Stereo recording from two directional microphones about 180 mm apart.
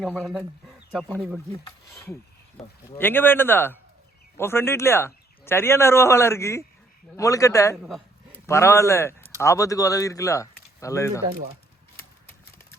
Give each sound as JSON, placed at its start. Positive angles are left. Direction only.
{"t": 0.2, "sound": "speech", "side_deg": 0}
{"t": 1.6, "sound": "speech", "side_deg": 15}
{"t": 7.8, "sound": "speech", "side_deg": 0}
{"t": 8.4, "sound": "speech", "side_deg": 15}